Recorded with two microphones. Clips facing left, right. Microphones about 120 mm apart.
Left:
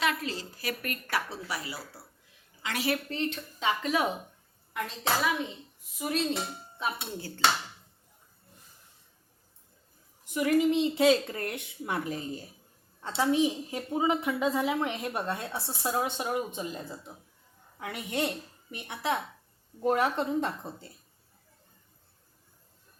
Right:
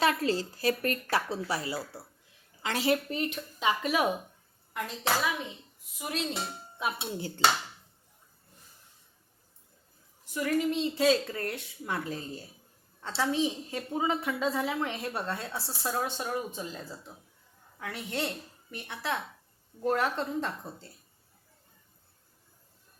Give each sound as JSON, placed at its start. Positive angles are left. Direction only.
{"t": 0.0, "sound": "a woman's voice", "side_deg": -35}
{"t": 3.1, "sound": "speech", "side_deg": -15}
{"t": 6.0, "sound": "speech", "side_deg": 0}
{"t": 7.0, "sound": "a woman's voice", "side_deg": -25}
{"t": 10.3, "sound": "a woman's voice", "side_deg": 20}